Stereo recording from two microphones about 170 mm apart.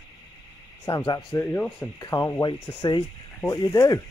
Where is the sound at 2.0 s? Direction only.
25° left (ahead or behind).